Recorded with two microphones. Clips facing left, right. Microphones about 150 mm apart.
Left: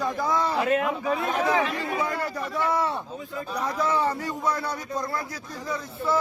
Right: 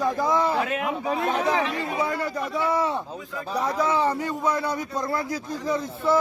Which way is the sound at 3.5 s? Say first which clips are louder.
Right 4 dB; 30° right (ahead or behind).